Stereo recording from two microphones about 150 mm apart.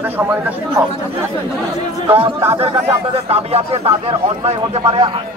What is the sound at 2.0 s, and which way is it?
Speech, 40° right (ahead or behind).